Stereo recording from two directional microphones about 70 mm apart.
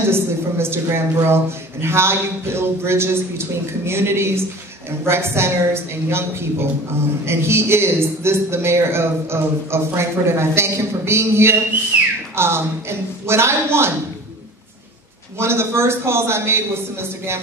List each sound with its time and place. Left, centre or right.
0.1 s speech: right
11.9 s whistling: centre
12.4 s speech: right
15.3 s speech: right